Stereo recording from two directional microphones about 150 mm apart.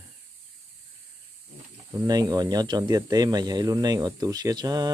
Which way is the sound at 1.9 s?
25° right (ahead or behind).